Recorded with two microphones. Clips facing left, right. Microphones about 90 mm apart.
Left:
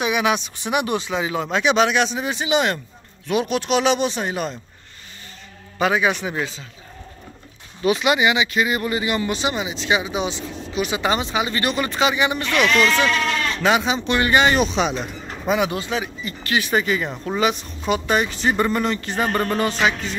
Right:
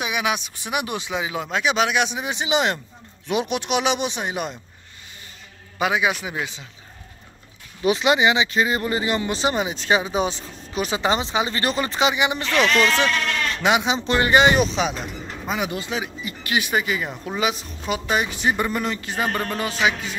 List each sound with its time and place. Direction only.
0.0 s speech: 5° right (ahead or behind)
5.8 s speech: 10° right (ahead or behind)
7.8 s speech: 25° right (ahead or behind)
11.0 s speech: 25° right (ahead or behind)
13.6 s speech: 15° right (ahead or behind)
14.6 s speech: centre (ahead or behind)
15.9 s speech: 15° right (ahead or behind)
16.7 s speech: 5° right (ahead or behind)